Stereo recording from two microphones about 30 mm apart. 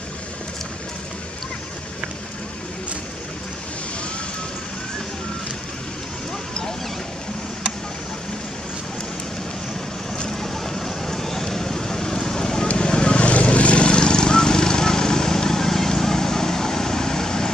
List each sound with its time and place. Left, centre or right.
10.4 s vehicle: centre
12.7 s vehicle: left